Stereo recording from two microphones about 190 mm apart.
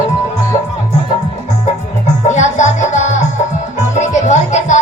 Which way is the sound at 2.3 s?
40° left (ahead or behind).